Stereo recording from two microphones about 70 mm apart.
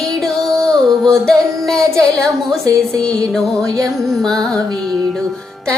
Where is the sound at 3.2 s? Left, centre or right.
Centre.